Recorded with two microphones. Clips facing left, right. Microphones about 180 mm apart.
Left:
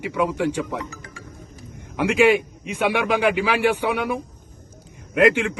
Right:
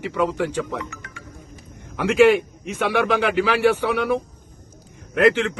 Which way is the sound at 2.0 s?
10° left (ahead or behind).